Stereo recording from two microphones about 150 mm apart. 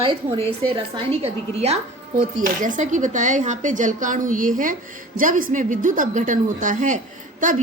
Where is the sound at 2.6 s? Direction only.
60° right (ahead or behind).